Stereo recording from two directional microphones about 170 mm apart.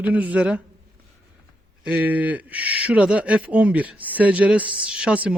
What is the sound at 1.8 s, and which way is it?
Speech, 10° right (ahead or behind).